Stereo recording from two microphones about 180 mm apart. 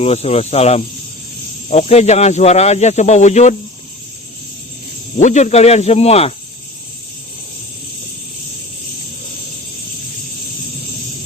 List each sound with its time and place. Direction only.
0.0 s cricket: 35° left (ahead or behind)
5.1 s cricket: 40° left (ahead or behind)